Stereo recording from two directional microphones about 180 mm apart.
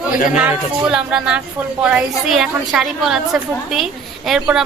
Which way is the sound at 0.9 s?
5° right (ahead or behind).